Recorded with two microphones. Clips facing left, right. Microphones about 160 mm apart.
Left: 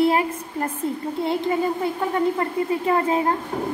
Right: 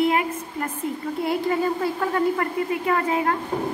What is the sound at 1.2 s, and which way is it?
A woman's voice, 20° left (ahead or behind).